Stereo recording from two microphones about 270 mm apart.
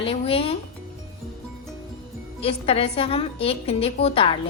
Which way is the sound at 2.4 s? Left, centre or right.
Left.